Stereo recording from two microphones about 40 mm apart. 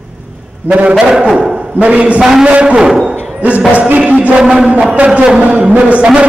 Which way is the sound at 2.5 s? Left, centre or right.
Right.